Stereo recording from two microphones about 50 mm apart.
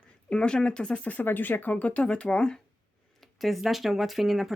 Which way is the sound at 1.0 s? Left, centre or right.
Left.